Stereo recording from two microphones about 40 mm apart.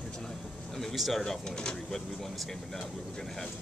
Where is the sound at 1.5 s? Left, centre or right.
Left.